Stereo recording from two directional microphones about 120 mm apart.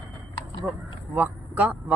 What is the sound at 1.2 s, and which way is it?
Speech, 15° right (ahead or behind).